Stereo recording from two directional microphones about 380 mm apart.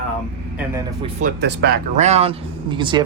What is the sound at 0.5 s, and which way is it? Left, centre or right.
Speech, centre.